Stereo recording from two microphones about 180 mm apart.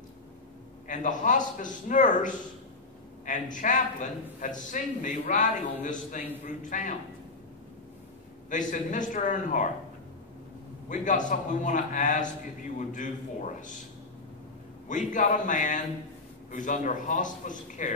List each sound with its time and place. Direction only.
0.8 s a man's voice: 45° left (ahead or behind)
8.5 s a man's voice: 45° left (ahead or behind)
10.9 s a man's voice: 45° left (ahead or behind)
14.9 s a man's voice: 45° left (ahead or behind)